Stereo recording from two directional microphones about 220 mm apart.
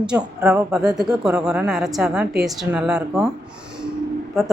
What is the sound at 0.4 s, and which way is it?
A woman's voice, 5° right (ahead or behind).